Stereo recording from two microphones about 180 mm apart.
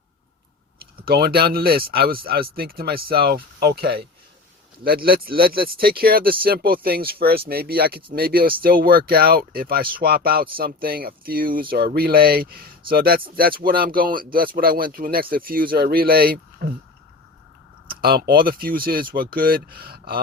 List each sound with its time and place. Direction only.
1.0 s speech: 60° right (ahead or behind)
17.8 s speech: 55° right (ahead or behind)